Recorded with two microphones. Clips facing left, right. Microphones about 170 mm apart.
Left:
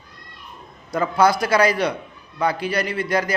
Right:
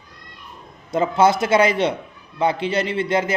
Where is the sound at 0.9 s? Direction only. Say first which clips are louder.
Right 1 dB; 25° right (ahead or behind).